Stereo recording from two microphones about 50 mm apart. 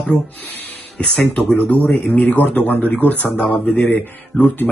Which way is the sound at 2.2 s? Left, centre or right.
Left.